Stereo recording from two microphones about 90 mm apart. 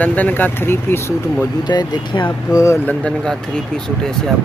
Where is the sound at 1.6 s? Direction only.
55° left (ahead or behind).